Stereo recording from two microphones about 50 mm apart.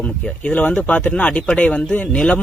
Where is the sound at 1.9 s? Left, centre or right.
Left.